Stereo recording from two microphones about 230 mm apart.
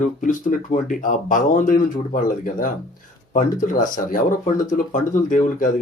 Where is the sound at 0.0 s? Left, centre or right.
Left.